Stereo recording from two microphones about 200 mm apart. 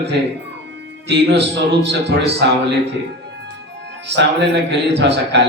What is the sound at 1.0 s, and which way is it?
A man's voice, 60° right (ahead or behind).